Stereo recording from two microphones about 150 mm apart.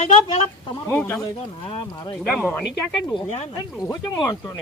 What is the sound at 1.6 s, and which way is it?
Speech, 35° left (ahead or behind).